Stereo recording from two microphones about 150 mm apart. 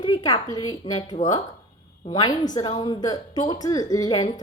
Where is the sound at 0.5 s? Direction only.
25° left (ahead or behind).